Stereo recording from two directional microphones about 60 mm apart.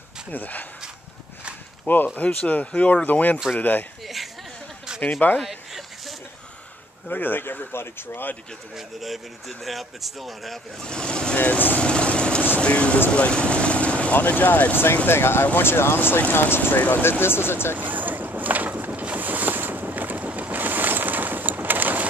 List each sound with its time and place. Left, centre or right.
0.3 s speech: left
2.1 s speech: left
4.0 s a sound: centre
5.4 s a sound: centre
7.1 s speech: left
8.7 s speech: centre
10.8 s speech: centre
11.3 s vehicle: left
13.1 s speech: centre; by 16.7 s left
16.7 s speech: left
17.7 s vehicle: right